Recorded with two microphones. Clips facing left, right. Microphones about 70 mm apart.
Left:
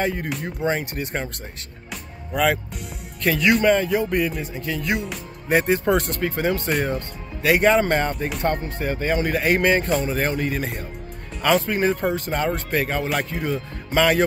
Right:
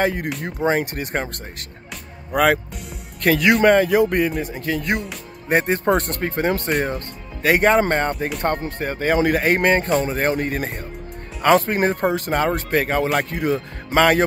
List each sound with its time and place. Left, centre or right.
0.0 s speech: right
2.3 s speech: right
4.9 s speech: centre
5.5 s speech: right